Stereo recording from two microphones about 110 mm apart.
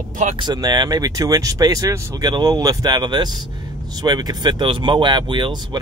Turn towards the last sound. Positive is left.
turn(degrees=-45)  # may be behind; listen again after turning